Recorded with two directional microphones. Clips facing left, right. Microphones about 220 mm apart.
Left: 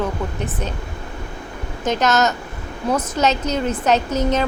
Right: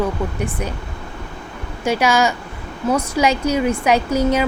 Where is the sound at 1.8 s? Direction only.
10° right (ahead or behind).